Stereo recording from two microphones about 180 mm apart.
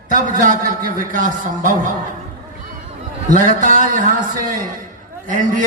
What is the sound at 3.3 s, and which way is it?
A man's voice, 50° right (ahead or behind).